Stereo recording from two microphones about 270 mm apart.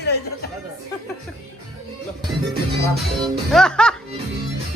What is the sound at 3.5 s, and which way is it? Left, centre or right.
Speech, centre.